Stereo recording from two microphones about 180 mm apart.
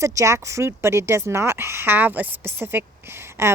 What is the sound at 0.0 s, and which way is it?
Speech, 15° right (ahead or behind).